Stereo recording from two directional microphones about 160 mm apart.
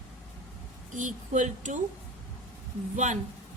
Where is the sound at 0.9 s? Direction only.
50° right (ahead or behind).